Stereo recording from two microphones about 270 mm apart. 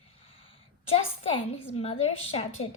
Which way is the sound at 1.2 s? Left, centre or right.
Left.